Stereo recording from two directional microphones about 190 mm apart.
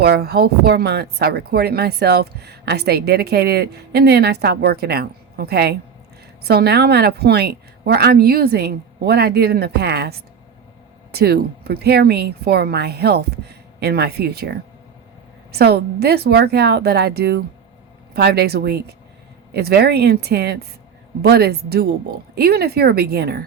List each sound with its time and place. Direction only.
0.0 s speech: 60° right (ahead or behind)
15.5 s speech: 55° right (ahead or behind)